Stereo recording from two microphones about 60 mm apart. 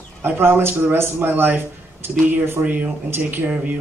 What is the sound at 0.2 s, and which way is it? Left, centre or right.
Speech, right.